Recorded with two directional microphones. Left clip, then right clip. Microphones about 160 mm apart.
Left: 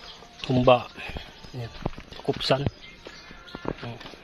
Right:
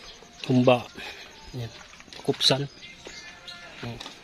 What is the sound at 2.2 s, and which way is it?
Speech, 25° right (ahead or behind).